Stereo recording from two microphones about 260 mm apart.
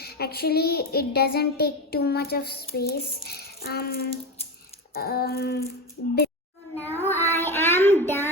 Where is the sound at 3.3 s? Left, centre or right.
Left.